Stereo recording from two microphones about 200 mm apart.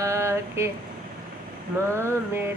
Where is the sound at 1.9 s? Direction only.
15° right (ahead or behind).